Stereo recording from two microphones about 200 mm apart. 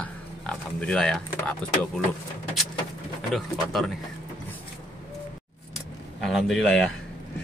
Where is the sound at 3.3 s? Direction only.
Centre (ahead or behind).